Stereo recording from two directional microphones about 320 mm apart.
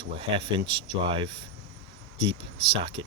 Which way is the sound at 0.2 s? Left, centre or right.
Centre.